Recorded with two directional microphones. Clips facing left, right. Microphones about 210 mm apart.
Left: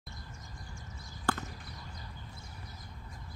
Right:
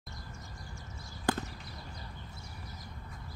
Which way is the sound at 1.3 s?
15° right (ahead or behind).